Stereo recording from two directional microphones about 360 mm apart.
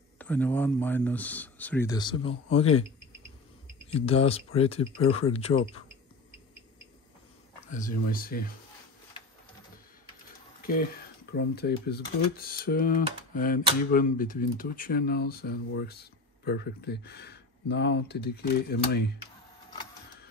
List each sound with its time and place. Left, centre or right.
0.2 s speech: centre
3.9 s speech: centre
7.7 s speech: left
10.6 s speech: left